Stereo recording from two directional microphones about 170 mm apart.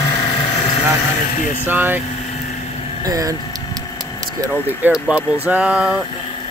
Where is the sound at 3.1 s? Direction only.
20° right (ahead or behind).